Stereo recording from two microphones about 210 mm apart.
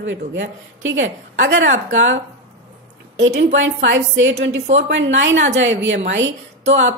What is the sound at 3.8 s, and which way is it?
A woman's voice, 60° right (ahead or behind).